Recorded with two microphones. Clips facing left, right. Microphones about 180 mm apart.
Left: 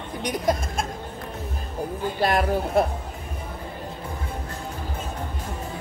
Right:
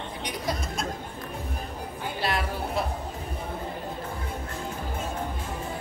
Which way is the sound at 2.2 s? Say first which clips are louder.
Left 7 dB; 50° left (ahead or behind).